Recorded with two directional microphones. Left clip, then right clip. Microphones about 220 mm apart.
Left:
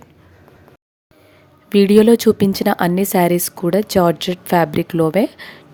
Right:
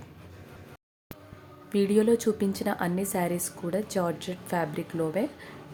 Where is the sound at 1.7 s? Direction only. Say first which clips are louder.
Left 12 dB; 45° left (ahead or behind).